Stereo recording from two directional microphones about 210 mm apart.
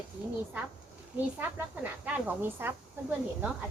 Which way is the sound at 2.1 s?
10° right (ahead or behind).